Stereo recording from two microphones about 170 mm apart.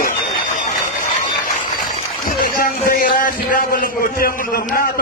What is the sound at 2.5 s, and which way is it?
A man's voice, 55° left (ahead or behind).